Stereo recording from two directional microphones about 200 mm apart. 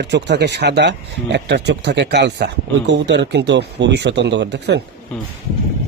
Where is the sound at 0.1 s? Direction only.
60° right (ahead or behind).